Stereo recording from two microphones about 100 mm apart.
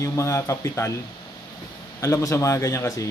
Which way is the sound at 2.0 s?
30° left (ahead or behind).